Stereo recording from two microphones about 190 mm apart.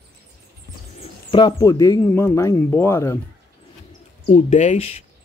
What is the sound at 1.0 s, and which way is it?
Speech, 25° left (ahead or behind).